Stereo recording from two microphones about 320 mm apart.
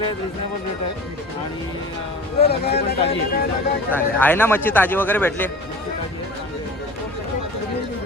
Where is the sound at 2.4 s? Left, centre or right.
Left.